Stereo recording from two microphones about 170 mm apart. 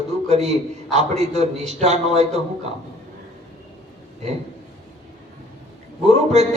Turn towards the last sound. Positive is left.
turn(degrees=-40)  # may be behind; listen again after turning